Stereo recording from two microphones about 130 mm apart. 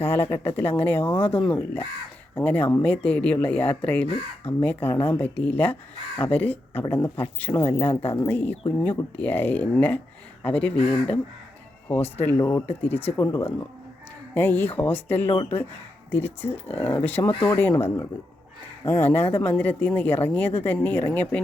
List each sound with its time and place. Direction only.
0.0 s speech: 15° left (ahead or behind)